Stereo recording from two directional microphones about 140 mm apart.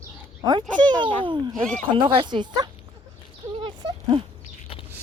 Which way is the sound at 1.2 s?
35° right (ahead or behind).